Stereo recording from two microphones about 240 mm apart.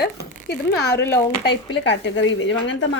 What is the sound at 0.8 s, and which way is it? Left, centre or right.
Speech, left.